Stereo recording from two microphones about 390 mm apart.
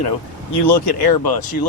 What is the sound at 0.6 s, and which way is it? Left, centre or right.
Speech, left.